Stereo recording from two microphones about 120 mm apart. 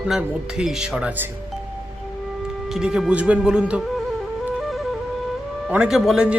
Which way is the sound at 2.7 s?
5° right (ahead or behind).